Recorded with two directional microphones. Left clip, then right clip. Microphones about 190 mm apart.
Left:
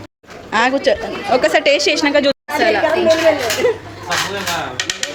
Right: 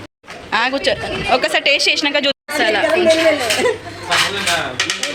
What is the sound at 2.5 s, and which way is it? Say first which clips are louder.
Speech: even; centre (ahead or behind).